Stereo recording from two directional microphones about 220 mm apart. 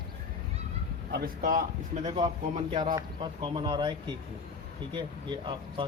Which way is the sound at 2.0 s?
25° right (ahead or behind).